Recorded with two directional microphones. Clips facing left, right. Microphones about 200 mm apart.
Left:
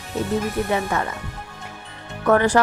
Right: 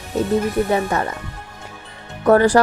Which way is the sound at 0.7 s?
35° right (ahead or behind).